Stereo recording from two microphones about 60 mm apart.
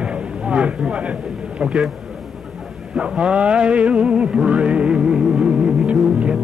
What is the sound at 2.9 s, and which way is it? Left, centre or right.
Music, centre.